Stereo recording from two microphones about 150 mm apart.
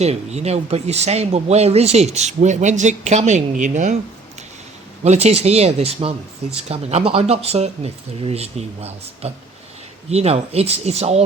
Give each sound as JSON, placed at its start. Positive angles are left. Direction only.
{"t": 0.0, "sound": "speech", "side_deg": -45}
{"t": 5.0, "sound": "speech", "side_deg": -45}